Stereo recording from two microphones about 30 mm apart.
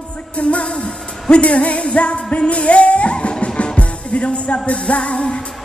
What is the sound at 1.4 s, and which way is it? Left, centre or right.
Music, left.